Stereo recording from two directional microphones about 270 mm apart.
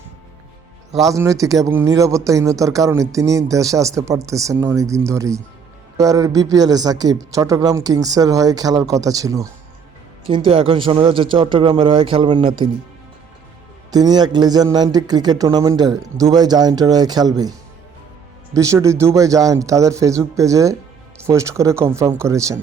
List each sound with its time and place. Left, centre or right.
1.1 s speech: centre
13.9 s speech: centre
18.5 s speech: centre